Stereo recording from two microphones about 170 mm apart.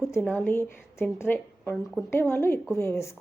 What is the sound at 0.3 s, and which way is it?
A woman's voice, 15° left (ahead or behind).